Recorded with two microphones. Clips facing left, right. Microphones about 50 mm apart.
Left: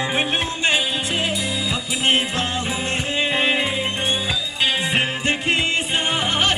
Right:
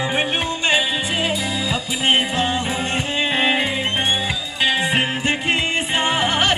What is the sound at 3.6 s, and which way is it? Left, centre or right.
Music, right.